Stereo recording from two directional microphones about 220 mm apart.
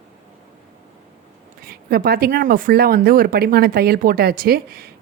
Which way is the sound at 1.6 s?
45° right (ahead or behind).